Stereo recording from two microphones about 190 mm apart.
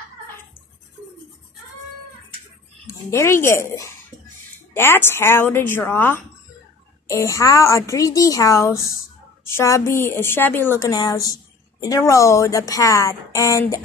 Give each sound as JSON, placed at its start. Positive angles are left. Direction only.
{"t": 2.9, "sound": "speech", "side_deg": 15}